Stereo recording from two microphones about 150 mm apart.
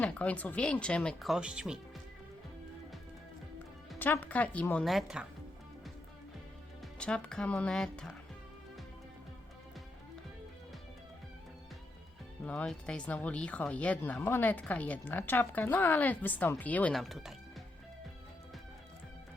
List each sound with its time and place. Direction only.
0.0 s speech: 10° left (ahead or behind)
3.9 s speech: 15° left (ahead or behind); by 5.2 s centre (ahead or behind)
6.8 s speech: 5° left (ahead or behind)
12.5 s speech: 5° left (ahead or behind)